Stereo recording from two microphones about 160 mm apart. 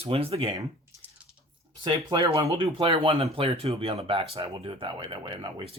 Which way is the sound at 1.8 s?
30° right (ahead or behind).